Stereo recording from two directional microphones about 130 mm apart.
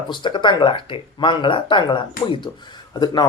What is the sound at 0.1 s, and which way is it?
Speech, 35° left (ahead or behind).